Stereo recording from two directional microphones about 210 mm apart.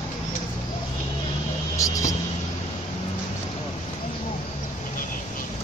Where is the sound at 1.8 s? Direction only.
15° left (ahead or behind).